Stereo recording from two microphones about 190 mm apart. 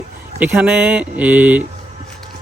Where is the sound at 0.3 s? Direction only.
5° right (ahead or behind).